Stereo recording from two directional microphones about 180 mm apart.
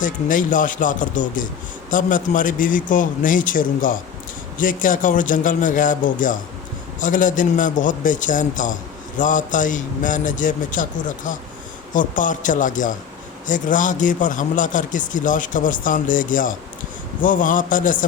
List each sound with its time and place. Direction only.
0.0 s speech: 45° left (ahead or behind)